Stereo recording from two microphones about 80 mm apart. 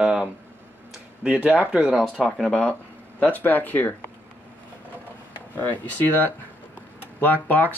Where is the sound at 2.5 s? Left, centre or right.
Centre.